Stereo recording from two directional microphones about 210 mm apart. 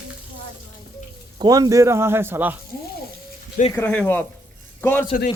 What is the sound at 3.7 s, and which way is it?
A man's voice, 10° left (ahead or behind).